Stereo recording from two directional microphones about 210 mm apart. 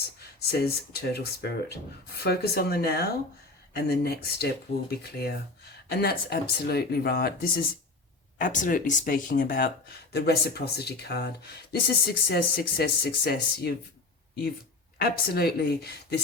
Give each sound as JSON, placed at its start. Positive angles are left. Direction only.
{"t": 0.2, "sound": "speech", "side_deg": 50}
{"t": 14.9, "sound": "speech", "side_deg": 45}